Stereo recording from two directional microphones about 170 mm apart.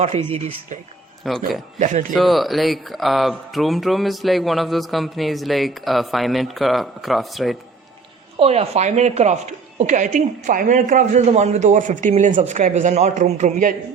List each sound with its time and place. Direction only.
1.2 s speech: centre (ahead or behind)
1.8 s speech: 45° right (ahead or behind)
2.1 s speech: centre (ahead or behind)
8.4 s a man's voice: 35° right (ahead or behind)